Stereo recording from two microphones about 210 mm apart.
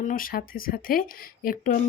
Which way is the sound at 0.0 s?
40° left (ahead or behind).